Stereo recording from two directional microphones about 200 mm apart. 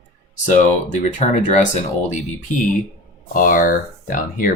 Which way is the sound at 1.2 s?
35° left (ahead or behind).